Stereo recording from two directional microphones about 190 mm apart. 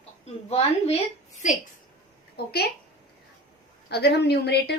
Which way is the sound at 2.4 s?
55° left (ahead or behind).